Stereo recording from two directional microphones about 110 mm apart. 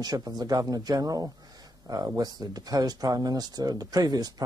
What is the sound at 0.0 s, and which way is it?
Speech, 35° right (ahead or behind).